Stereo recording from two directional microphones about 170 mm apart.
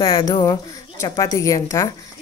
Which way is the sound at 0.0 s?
30° left (ahead or behind).